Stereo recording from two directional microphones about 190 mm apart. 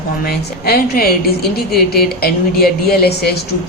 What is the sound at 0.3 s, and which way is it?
A woman's voice, 55° left (ahead or behind).